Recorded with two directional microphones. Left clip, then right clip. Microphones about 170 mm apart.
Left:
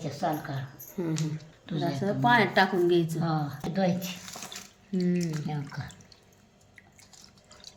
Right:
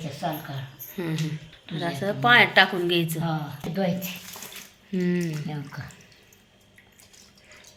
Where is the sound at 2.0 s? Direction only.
5° right (ahead or behind).